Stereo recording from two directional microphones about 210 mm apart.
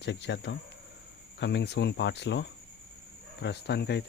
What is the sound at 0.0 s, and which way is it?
Speech, 55° left (ahead or behind).